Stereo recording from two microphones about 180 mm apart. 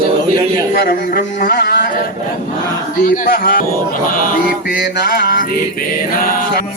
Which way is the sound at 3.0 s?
45° left (ahead or behind).